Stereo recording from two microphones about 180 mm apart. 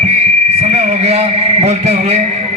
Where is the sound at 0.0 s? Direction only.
35° right (ahead or behind).